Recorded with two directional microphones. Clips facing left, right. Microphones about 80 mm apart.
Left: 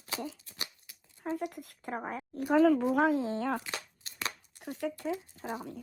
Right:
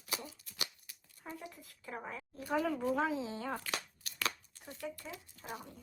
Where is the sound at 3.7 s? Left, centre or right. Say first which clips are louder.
Even; left.